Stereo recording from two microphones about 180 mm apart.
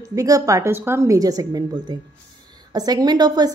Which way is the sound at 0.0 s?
20° right (ahead or behind).